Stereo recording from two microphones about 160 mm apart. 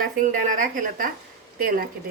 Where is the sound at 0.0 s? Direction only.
55° right (ahead or behind).